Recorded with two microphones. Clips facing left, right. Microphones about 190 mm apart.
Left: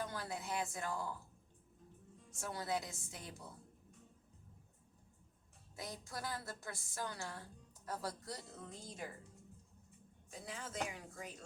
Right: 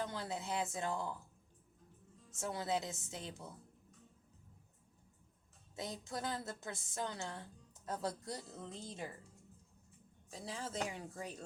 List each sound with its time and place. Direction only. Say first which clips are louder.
0.0 s a woman's voice: right 2 dB; 20° right (ahead or behind)
2.4 s a woman's voice: right 3 dB; 20° right (ahead or behind)
5.7 s a woman's voice: right 4 dB; 25° right (ahead or behind)
10.3 s speech: right 2 dB; 30° right (ahead or behind)